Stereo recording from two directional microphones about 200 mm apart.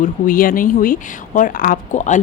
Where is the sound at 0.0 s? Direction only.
45° left (ahead or behind).